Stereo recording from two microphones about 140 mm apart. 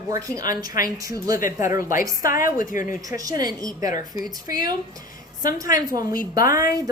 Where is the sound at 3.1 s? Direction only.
25° right (ahead or behind).